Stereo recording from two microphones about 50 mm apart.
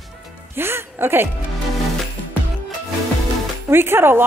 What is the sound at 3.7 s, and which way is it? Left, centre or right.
Speech, right.